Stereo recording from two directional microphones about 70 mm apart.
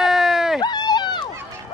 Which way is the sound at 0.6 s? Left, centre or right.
Left.